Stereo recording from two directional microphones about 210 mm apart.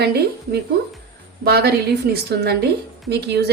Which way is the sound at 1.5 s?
50° right (ahead or behind).